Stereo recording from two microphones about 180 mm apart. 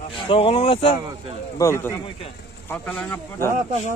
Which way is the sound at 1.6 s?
15° left (ahead or behind).